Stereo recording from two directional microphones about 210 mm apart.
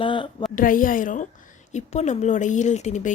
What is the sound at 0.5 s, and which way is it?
Speech, 40° left (ahead or behind).